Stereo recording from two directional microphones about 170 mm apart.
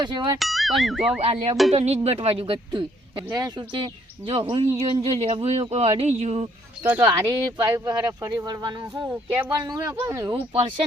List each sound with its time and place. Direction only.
0.0 s speech: 25° right (ahead or behind)
0.3 s speech: centre (ahead or behind)
1.2 s speech: 35° right (ahead or behind)
6.8 s speech: 10° right (ahead or behind)
7.1 s speech: 25° right (ahead or behind)
10.3 s speech: 35° right (ahead or behind)